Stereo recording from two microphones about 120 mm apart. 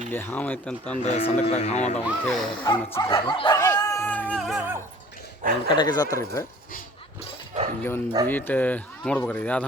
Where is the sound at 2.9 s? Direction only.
30° left (ahead or behind).